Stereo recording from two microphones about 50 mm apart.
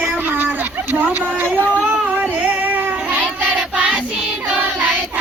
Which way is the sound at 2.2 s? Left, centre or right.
Right.